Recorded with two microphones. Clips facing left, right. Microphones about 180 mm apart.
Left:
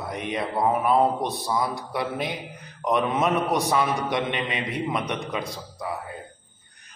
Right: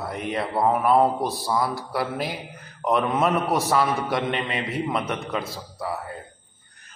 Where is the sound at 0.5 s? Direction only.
Centre (ahead or behind).